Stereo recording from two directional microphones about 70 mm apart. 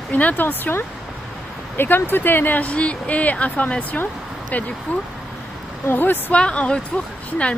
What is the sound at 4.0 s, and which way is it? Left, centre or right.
Vehicle, left.